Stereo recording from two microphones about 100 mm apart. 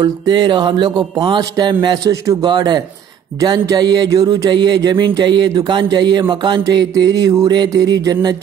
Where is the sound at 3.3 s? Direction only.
40° right (ahead or behind).